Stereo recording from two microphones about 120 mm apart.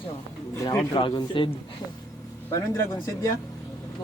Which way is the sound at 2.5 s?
25° left (ahead or behind).